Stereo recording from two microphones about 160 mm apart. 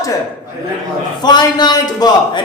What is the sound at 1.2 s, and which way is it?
A man's voice, 25° left (ahead or behind).